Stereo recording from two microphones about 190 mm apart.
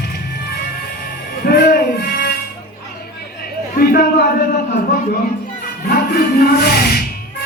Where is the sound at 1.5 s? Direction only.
55° left (ahead or behind).